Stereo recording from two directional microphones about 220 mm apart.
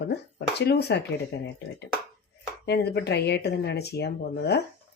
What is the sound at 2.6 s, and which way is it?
Speech, 45° left (ahead or behind).